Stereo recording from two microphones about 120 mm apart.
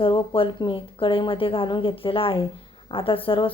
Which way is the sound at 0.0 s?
45° left (ahead or behind).